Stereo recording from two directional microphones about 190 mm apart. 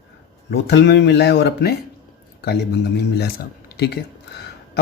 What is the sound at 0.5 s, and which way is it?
Speech, 70° left (ahead or behind).